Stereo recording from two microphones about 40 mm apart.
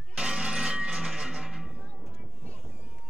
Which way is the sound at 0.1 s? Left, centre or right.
Centre.